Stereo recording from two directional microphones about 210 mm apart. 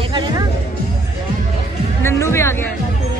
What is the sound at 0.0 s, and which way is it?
Music, 20° right (ahead or behind).